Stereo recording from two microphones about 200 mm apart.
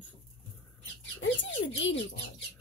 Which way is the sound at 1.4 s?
65° left (ahead or behind).